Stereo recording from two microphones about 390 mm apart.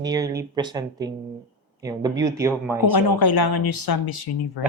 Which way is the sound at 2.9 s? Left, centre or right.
Left.